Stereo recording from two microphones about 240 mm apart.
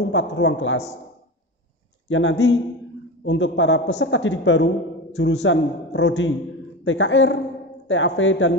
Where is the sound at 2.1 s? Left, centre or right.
Left.